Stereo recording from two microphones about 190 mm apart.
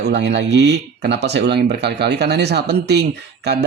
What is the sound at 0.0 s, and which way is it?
Speech, 65° right (ahead or behind).